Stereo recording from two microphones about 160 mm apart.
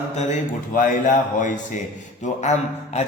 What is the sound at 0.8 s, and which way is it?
A man's voice, 50° left (ahead or behind).